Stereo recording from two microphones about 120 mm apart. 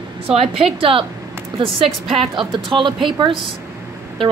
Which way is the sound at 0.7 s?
50° right (ahead or behind).